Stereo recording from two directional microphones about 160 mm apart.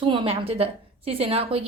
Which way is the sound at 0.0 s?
30° right (ahead or behind).